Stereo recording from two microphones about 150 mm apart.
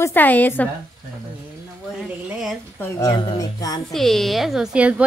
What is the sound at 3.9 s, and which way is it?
A woman's voice, centre (ahead or behind).